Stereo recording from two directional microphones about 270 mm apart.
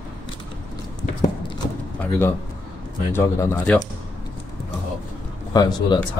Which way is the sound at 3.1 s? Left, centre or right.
Centre.